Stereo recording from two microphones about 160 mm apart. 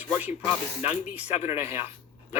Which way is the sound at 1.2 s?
40° left (ahead or behind).